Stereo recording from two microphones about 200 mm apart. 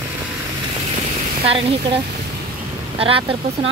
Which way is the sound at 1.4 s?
30° right (ahead or behind).